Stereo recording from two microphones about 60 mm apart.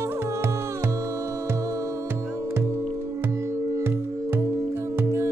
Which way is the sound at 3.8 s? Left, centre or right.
Right.